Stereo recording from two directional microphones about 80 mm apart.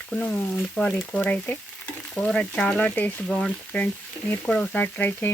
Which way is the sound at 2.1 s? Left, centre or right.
Centre.